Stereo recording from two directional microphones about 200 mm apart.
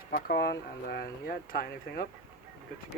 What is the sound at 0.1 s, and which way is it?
Speech, 50° left (ahead or behind).